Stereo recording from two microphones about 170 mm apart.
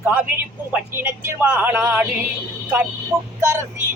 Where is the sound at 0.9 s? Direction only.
15° right (ahead or behind).